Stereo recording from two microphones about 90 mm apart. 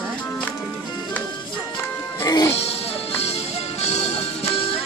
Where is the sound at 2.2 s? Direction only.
45° left (ahead or behind).